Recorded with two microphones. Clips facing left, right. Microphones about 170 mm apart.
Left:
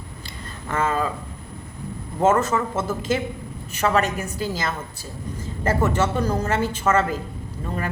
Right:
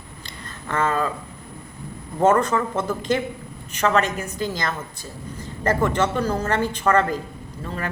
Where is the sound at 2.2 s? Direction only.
5° left (ahead or behind).